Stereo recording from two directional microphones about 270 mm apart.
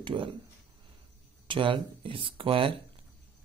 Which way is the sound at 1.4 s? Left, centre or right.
Centre.